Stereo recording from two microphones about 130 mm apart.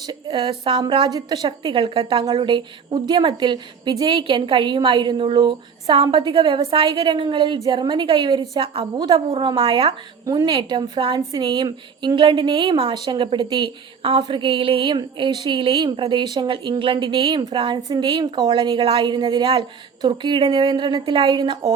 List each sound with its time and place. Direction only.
0.1 s a woman's voice: 35° right (ahead or behind)